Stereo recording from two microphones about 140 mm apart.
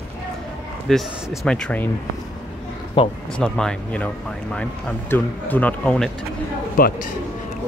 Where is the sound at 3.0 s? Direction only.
35° left (ahead or behind).